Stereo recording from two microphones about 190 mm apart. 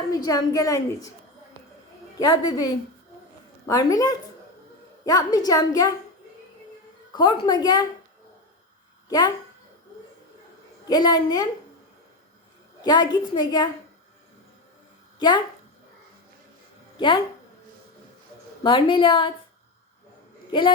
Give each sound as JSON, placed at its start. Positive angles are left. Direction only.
{"t": 0.1, "sound": "a woman's voice", "side_deg": 20}
{"t": 2.1, "sound": "a woman's voice", "side_deg": 20}
{"t": 7.2, "sound": "a woman's voice", "side_deg": 25}
{"t": 9.0, "sound": "a child's voice", "side_deg": 20}
{"t": 10.8, "sound": "a woman's voice", "side_deg": 20}
{"t": 12.8, "sound": "a woman's voice", "side_deg": 20}
{"t": 18.6, "sound": "a woman's voice", "side_deg": 25}
{"t": 20.5, "sound": "a woman's voice", "side_deg": 25}